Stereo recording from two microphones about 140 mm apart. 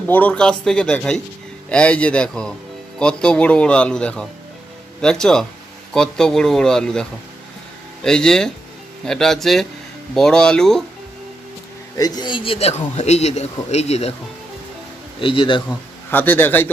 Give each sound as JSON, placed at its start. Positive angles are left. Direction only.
{"t": 0.1, "sound": "a man's voice", "side_deg": 10}
{"t": 11.9, "sound": "speech", "side_deg": 30}
{"t": 15.2, "sound": "speech", "side_deg": 40}
{"t": 16.0, "sound": "a man's voice", "side_deg": 15}